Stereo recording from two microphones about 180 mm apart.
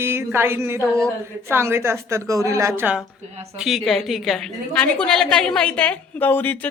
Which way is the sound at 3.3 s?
35° right (ahead or behind).